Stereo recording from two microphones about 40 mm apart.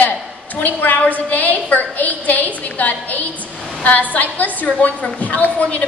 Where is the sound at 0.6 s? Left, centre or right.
Left.